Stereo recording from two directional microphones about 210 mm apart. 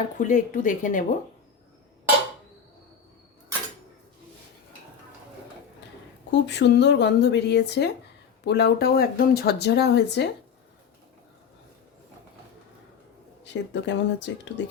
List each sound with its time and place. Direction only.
0.2 s speech: 35° left (ahead or behind)
6.3 s speech: 55° left (ahead or behind)
13.4 s speech: 55° left (ahead or behind)